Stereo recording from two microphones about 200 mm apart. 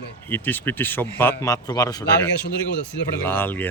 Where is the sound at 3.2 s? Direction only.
10° left (ahead or behind).